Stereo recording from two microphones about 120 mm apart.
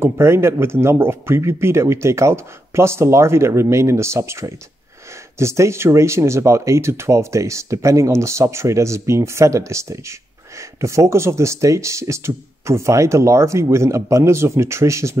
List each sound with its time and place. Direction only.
0.0 s speech: 20° right (ahead or behind)